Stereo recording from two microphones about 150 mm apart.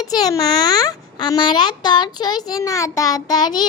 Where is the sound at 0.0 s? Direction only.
25° left (ahead or behind).